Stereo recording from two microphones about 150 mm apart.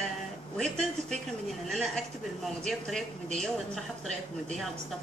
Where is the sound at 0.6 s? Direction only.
5° left (ahead or behind).